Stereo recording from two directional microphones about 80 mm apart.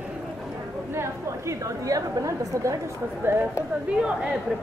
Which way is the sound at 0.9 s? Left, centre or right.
Right.